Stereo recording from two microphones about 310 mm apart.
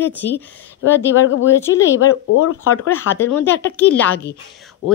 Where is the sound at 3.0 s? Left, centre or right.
Centre.